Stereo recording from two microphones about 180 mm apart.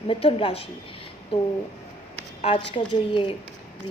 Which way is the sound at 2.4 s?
30° left (ahead or behind).